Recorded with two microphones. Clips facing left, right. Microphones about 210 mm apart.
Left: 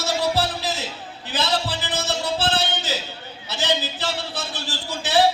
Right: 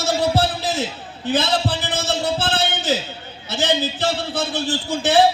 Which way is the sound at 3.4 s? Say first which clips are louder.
Right 4 dB; 50° right (ahead or behind).